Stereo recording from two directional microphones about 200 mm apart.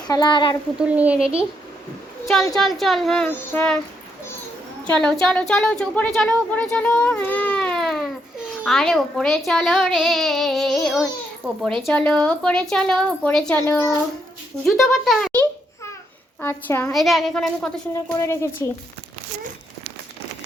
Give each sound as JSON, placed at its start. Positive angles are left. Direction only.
{"t": 0.1, "sound": "speech", "side_deg": 20}
{"t": 0.8, "sound": "a woman's voice", "side_deg": -5}
{"t": 4.9, "sound": "speech", "side_deg": 5}
{"t": 17.9, "sound": "a woman's voice", "side_deg": 15}